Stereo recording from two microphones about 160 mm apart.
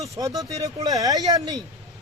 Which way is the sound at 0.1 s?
20° right (ahead or behind).